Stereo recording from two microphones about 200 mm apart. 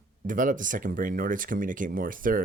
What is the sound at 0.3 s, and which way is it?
Speech, 40° right (ahead or behind).